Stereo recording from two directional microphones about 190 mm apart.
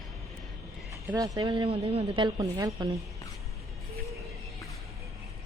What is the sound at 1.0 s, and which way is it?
A woman's voice, 20° right (ahead or behind).